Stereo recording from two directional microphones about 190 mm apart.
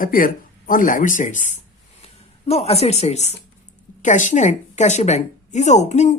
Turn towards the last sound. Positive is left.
turn(degrees=35)  # may be behind; listen again after turning